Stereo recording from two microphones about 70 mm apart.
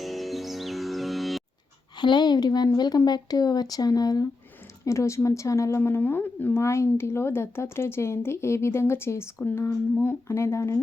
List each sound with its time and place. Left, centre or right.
0.0 s music: centre
2.0 s a woman's voice: left
3.1 s speech: left
4.9 s a woman's voice: left
6.0 s speech: left
6.6 s speech: left
10.2 s a woman's voice: left